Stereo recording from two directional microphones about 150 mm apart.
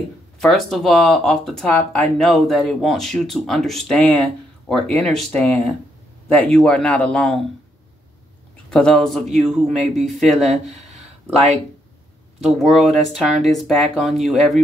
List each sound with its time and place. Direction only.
0.4 s a man's voice: centre (ahead or behind)
8.6 s speech: 5° left (ahead or behind)
11.3 s speech: 45° right (ahead or behind)
12.4 s speech: centre (ahead or behind)